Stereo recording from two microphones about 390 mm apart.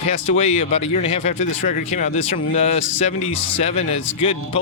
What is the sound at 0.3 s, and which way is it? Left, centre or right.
Speech, centre.